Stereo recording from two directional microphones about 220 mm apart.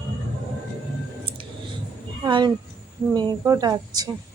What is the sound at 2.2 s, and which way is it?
Speech, 20° right (ahead or behind).